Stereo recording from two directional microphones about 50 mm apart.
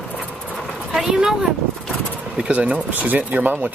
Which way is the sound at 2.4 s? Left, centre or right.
Right.